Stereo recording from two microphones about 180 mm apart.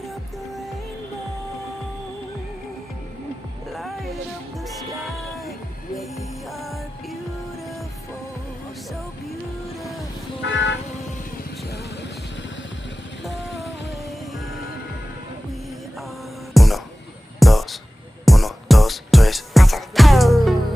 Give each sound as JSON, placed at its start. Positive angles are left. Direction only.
{"t": 0.0, "sound": "music", "side_deg": 0}
{"t": 3.7, "sound": "music", "side_deg": 0}
{"t": 10.4, "sound": "vehicle", "side_deg": 90}
{"t": 13.2, "sound": "music", "side_deg": 0}
{"t": 16.6, "sound": "music", "side_deg": 0}
{"t": 17.4, "sound": "a sound", "side_deg": 0}
{"t": 18.3, "sound": "music", "side_deg": 0}